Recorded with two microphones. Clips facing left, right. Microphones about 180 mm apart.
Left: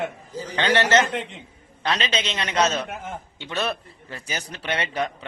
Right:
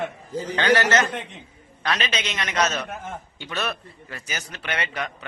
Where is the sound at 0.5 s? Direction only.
25° left (ahead or behind).